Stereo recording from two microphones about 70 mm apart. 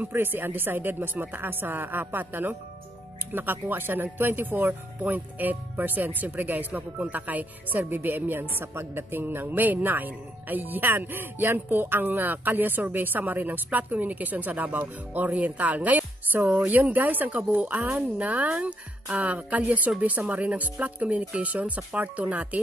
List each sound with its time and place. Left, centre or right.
0.0 s speech: right